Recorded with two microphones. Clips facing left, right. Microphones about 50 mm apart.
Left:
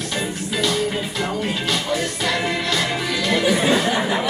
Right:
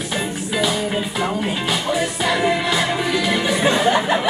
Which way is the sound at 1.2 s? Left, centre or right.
Centre.